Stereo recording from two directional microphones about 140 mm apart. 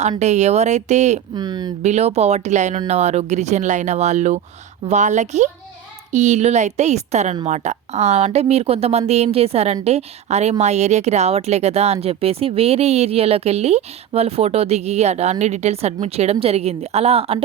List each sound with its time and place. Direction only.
0.2 s speech: 55° right (ahead or behind)
1.4 s speech: 30° right (ahead or behind)
1.8 s speech: 50° right (ahead or behind)